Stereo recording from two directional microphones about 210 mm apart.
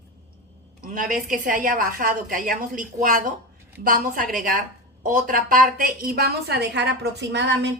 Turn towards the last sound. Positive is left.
turn(degrees=-55)  # may be behind; listen again after turning